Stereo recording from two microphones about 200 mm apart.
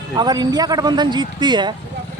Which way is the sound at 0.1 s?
20° right (ahead or behind).